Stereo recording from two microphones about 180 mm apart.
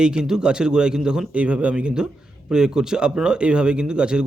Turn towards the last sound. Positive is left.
turn(degrees=-5)  # may be behind; listen again after turning